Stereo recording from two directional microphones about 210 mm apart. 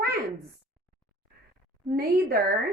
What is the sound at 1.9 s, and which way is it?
Speech, 45° right (ahead or behind).